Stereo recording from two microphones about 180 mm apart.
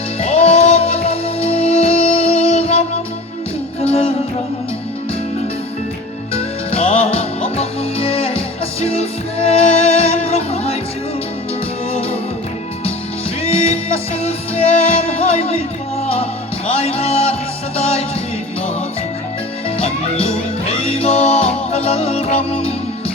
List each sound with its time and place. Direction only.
0.2 s music: 35° left (ahead or behind)
6.3 s music: 30° left (ahead or behind)
13.4 s music: 35° left (ahead or behind)
16.6 s music: 30° left (ahead or behind)
19.7 s music: 30° left (ahead or behind)